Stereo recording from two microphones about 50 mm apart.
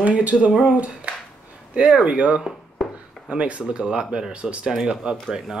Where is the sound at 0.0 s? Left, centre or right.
Right.